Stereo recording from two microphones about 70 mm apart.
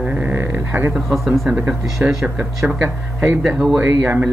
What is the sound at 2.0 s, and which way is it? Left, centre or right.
Speech, centre.